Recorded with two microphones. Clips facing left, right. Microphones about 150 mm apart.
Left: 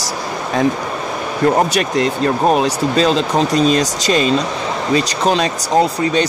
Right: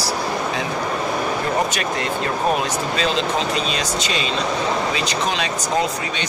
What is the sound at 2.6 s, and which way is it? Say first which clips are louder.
Speech: left 7 dB; 40° left (ahead or behind).